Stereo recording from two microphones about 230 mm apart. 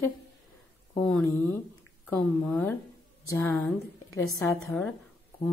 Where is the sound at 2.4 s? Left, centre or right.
Centre.